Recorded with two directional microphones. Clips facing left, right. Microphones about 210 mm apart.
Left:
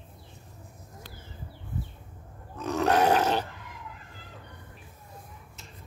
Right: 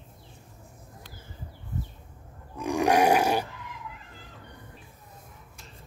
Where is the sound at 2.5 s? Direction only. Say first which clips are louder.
Right 2 dB; 15° right (ahead or behind).